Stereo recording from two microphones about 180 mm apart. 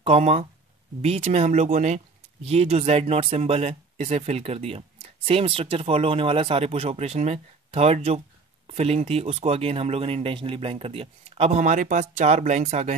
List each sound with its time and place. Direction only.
0.0 s speech: 35° right (ahead or behind)